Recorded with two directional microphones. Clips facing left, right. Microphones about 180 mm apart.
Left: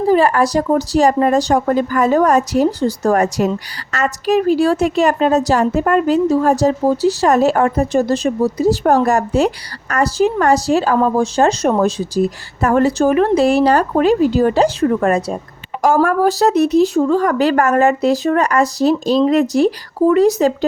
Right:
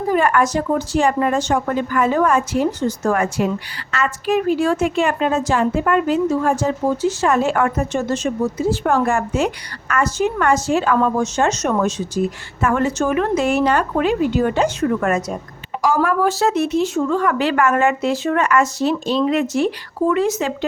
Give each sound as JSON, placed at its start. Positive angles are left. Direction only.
{"t": 0.1, "sound": "a woman's voice", "side_deg": 30}
{"t": 15.8, "sound": "a woman's voice", "side_deg": 50}